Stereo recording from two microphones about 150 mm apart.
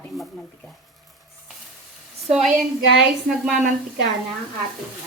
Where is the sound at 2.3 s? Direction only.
Centre (ahead or behind).